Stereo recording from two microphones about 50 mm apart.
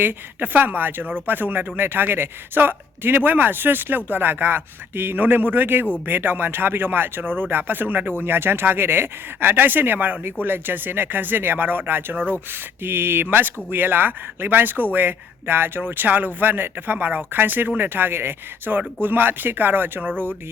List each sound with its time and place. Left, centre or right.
0.0 s speech: right